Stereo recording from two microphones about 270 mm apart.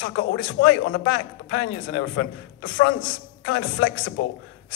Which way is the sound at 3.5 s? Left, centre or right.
Left.